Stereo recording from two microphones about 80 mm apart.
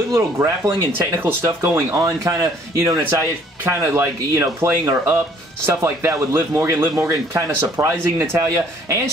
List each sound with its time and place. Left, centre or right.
0.1 s speech: right
2.0 s speech: right
3.0 s speech: right